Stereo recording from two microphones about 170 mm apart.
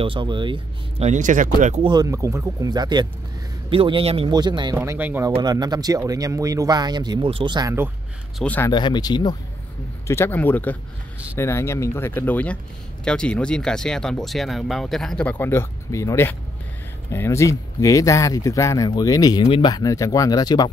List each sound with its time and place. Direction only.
0.0 s speech: 30° right (ahead or behind); by 1.8 s 50° right (ahead or behind)
1.8 s speech: 25° right (ahead or behind)
4.7 s speech: 10° right (ahead or behind)
5.3 s speech: 25° right (ahead or behind)
8.4 s speech: 10° left (ahead or behind)
8.6 s speech: 25° left (ahead or behind)